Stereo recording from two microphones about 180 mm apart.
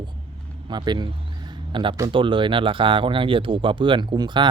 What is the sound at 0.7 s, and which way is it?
Speech, 25° right (ahead or behind).